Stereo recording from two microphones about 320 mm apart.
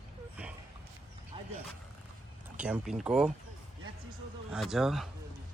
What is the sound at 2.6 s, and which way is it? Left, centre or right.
Speech, centre.